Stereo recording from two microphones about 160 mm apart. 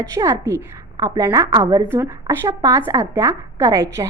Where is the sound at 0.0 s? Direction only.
20° right (ahead or behind).